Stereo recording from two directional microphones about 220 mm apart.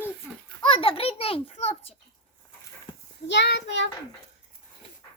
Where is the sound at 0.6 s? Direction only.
25° left (ahead or behind).